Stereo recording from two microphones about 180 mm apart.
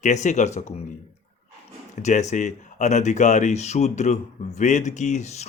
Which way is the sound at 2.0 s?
40° left (ahead or behind).